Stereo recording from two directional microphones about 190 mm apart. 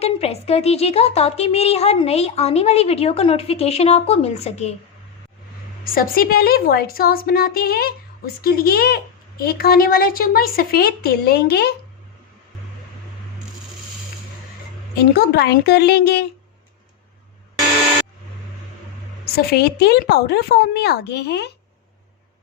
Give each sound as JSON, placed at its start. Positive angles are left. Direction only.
{"t": 0.0, "sound": "a woman's voice", "side_deg": 30}
{"t": 5.8, "sound": "speech", "side_deg": 50}
{"t": 14.9, "sound": "speech", "side_deg": 60}
{"t": 19.4, "sound": "speech", "side_deg": 55}